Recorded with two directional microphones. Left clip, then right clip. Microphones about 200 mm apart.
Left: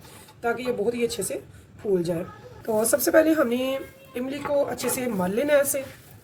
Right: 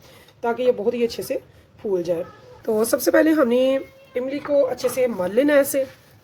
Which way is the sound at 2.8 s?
40° right (ahead or behind).